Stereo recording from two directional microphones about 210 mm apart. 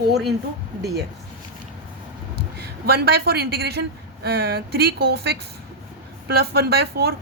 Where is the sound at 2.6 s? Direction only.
50° right (ahead or behind).